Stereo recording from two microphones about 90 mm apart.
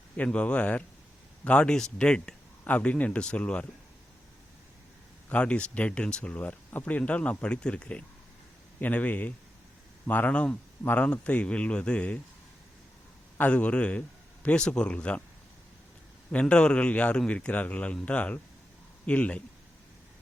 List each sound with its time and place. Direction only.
0.2 s speech: 15° left (ahead or behind)
5.3 s speech: 10° left (ahead or behind)
13.4 s speech: 15° left (ahead or behind)
16.3 s speech: 10° left (ahead or behind)